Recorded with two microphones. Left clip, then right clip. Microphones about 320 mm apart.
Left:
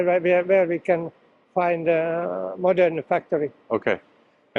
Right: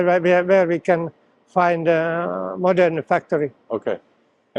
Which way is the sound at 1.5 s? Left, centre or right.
Right.